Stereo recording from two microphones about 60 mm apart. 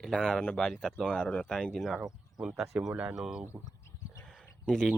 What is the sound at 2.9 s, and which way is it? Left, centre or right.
Speech, right.